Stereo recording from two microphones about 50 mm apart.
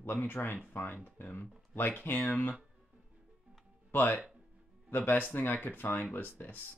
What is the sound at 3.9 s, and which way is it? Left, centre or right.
Speech, left.